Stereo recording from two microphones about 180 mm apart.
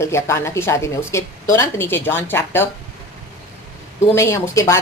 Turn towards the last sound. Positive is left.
turn(degrees=15)  # may be behind; listen again after turning